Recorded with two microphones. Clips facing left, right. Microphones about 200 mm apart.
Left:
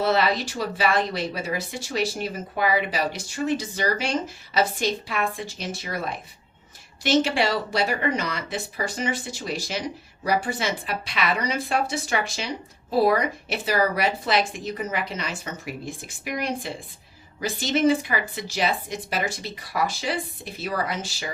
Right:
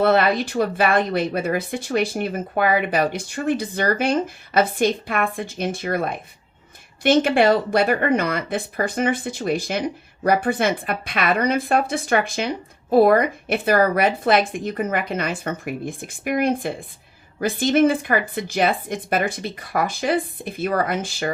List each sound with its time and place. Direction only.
0.0 s speech: 55° right (ahead or behind)